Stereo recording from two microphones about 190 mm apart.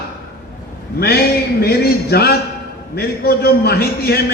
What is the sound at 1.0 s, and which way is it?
A man's voice, 55° left (ahead or behind).